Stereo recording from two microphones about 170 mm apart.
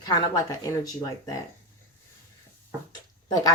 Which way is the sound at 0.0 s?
20° left (ahead or behind).